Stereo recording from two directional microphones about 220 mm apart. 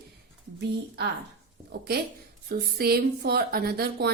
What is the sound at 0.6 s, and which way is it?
Speech, 50° right (ahead or behind).